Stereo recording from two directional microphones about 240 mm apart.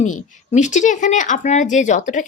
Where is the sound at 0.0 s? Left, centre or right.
Left.